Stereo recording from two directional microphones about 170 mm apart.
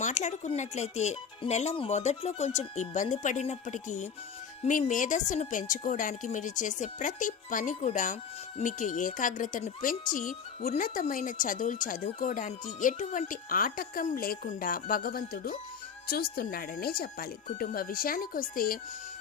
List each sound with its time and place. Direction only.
0.0 s speech: 45° left (ahead or behind)